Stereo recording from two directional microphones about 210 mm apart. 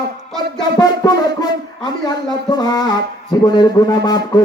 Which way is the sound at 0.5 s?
20° left (ahead or behind).